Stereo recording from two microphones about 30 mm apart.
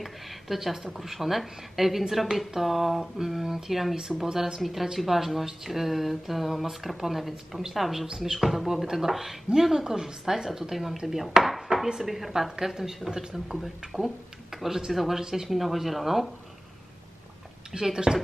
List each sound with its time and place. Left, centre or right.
0.0 s a woman's voice: centre
15.1 s speech: centre
15.5 s a woman's voice: centre
17.7 s speech: right